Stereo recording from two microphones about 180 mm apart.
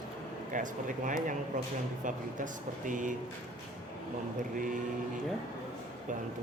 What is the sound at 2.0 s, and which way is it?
Speech, 45° right (ahead or behind).